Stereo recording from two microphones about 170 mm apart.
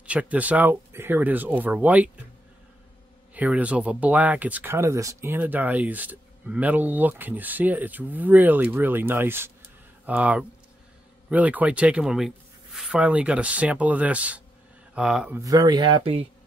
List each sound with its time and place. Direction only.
0.0 s speech: 5° right (ahead or behind)
3.3 s speech: 10° right (ahead or behind)
15.0 s mantra: 5° right (ahead or behind)
15.4 s speech: 25° right (ahead or behind)